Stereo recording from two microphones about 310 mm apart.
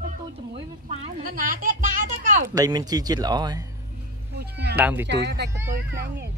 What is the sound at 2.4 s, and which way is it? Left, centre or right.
Speech, centre.